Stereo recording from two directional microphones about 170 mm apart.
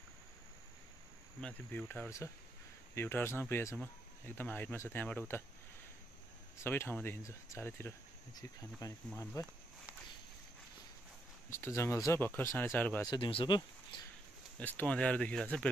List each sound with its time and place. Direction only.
1.4 s speech: 10° left (ahead or behind)
6.6 s speech: 15° left (ahead or behind)
11.5 s speech: 15° left (ahead or behind)
13.1 s speech: 30° left (ahead or behind)
14.6 s speech: 10° left (ahead or behind)